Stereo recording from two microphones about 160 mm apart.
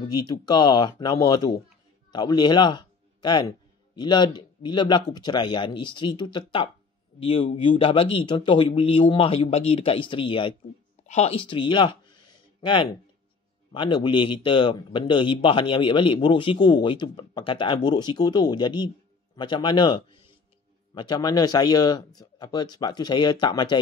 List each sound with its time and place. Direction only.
0.1 s a man's voice: 25° left (ahead or behind)